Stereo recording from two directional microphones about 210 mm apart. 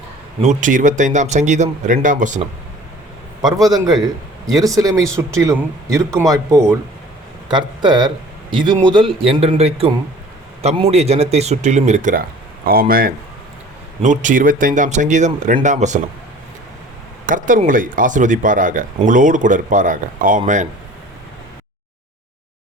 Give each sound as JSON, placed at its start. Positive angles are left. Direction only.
{"t": 0.4, "sound": "speech", "side_deg": -35}
{"t": 3.4, "sound": "a man's voice", "side_deg": -15}
{"t": 17.2, "sound": "speech", "side_deg": -40}